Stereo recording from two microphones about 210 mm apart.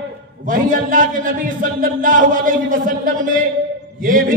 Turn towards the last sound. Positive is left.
turn(degrees=-40)  # may be behind; listen again after turning